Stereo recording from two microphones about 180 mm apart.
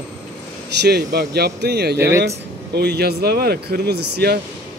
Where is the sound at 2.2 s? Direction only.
65° right (ahead or behind).